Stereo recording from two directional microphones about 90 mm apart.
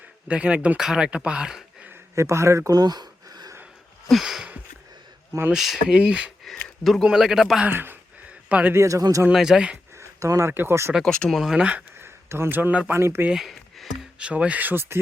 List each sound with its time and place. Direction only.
0.3 s speech: 15° right (ahead or behind)
1.9 s speech: 30° right (ahead or behind)
2.7 s a sound: 50° right (ahead or behind)
4.1 s a sound: 5° right (ahead or behind)
5.5 s speech: 5° right (ahead or behind)
6.4 s speech: 5° left (ahead or behind)
7.7 s a man's voice: 25° right (ahead or behind)
8.7 s speech: 35° right (ahead or behind)
9.3 s speech: 5° right (ahead or behind)
10.0 s speech: 35° right (ahead or behind)
11.0 s speech: 5° left (ahead or behind)
11.9 s a sound: 25° right (ahead or behind)
12.9 s speech: 30° right (ahead or behind)
13.3 s speech: centre (ahead or behind); by 14.9 s 20° right (ahead or behind)